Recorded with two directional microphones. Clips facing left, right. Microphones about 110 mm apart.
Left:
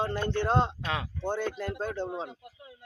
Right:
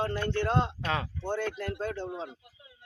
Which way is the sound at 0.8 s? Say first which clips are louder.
Right 2 dB; centre (ahead or behind).